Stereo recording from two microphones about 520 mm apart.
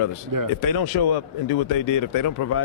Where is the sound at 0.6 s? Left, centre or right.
Left.